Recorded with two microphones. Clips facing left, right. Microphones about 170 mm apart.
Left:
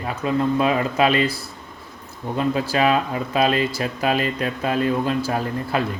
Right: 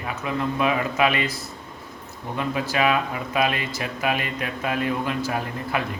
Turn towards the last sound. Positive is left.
turn(degrees=35)  # may be behind; listen again after turning